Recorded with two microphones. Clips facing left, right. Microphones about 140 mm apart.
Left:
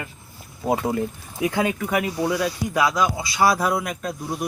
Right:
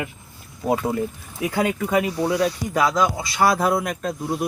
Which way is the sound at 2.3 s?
15° right (ahead or behind).